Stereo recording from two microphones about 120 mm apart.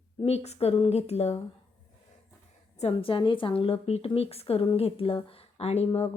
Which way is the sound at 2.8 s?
50° left (ahead or behind).